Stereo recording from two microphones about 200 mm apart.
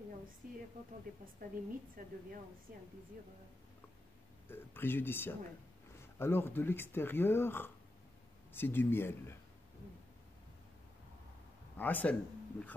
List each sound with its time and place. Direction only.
0.4 s speech: 45° right (ahead or behind)
4.5 s speech: 10° left (ahead or behind)
11.7 s speech: 10° left (ahead or behind)